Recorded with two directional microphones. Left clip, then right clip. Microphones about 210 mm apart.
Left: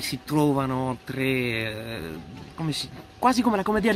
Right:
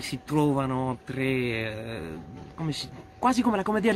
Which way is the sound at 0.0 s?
Centre (ahead or behind).